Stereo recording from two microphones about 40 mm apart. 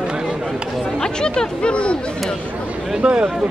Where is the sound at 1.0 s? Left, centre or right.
Centre.